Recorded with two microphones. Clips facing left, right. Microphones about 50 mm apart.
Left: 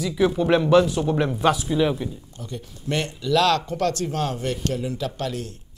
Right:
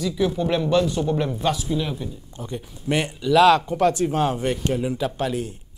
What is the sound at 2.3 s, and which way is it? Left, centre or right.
Speech, right.